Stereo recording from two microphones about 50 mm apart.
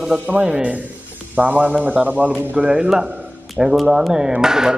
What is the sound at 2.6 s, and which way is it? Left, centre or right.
A man's voice, right.